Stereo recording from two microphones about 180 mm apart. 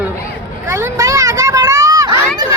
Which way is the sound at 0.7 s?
15° right (ahead or behind).